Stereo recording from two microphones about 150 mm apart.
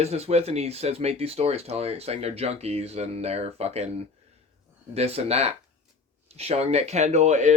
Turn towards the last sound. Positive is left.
turn(degrees=-50)  # may be behind; listen again after turning